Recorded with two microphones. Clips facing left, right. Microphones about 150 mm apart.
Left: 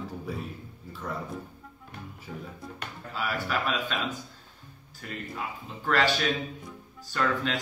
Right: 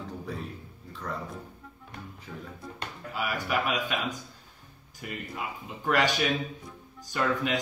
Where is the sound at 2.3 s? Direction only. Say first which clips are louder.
Left 3 dB; 10° left (ahead or behind).